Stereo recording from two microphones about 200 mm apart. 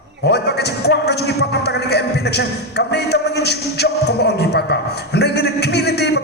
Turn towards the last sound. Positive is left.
turn(degrees=55)  # may be behind; listen again after turning